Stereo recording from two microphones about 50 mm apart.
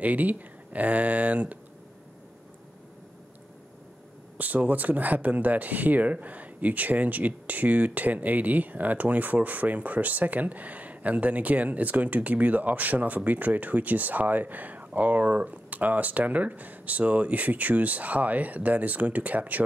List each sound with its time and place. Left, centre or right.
0.0 s speech: right
4.4 s speech: right